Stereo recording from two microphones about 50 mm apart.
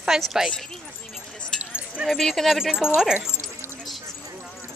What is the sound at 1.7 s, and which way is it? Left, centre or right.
Keys jangling, right.